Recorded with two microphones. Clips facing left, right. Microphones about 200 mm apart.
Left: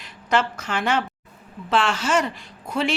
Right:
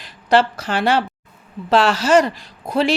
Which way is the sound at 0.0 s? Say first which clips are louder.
Right 6 dB; 35° right (ahead or behind).